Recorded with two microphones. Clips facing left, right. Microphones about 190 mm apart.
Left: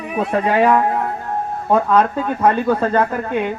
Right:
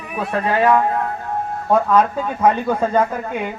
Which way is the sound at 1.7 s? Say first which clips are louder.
Even; 5° right (ahead or behind).